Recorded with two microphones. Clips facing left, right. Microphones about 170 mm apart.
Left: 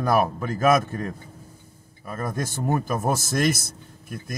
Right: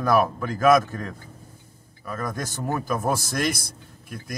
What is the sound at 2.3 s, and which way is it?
A man's voice, 25° left (ahead or behind).